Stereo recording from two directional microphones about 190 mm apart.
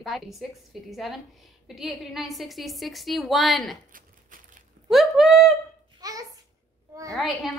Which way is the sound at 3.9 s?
45° right (ahead or behind).